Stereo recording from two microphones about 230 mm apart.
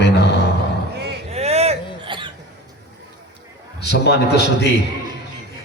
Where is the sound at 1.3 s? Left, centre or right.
Right.